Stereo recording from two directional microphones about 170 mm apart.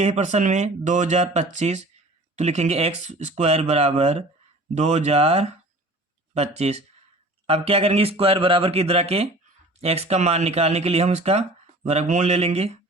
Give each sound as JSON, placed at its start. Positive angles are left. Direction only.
{"t": 0.0, "sound": "speech", "side_deg": -40}